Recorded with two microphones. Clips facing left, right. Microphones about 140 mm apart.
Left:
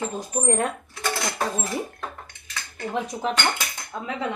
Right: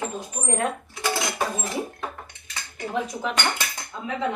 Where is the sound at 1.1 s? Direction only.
25° right (ahead or behind).